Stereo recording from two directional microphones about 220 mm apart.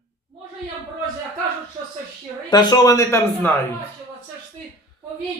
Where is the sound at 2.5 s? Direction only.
20° left (ahead or behind).